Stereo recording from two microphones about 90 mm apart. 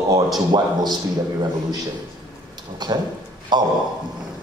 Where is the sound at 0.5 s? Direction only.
55° right (ahead or behind).